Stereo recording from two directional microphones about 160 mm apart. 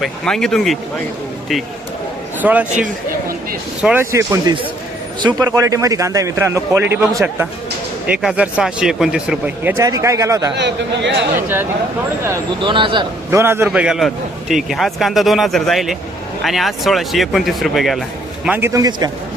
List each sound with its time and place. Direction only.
0.0 s a man's voice: 5° left (ahead or behind)
2.4 s a man's voice: 10° right (ahead or behind)
2.7 s speech: 60° right (ahead or behind)
3.8 s a man's voice: 15° right (ahead or behind)
8.0 s a man's voice: 5° right (ahead or behind)
9.7 s a man's voice: 20° right (ahead or behind)
10.6 s speech: 90° right
11.3 s speech: 15° right (ahead or behind)
12.5 s a man's voice: 30° right (ahead or behind)
13.3 s speech: 15° right (ahead or behind)
13.7 s a man's voice: 5° right (ahead or behind)
18.4 s a man's voice: 15° right (ahead or behind)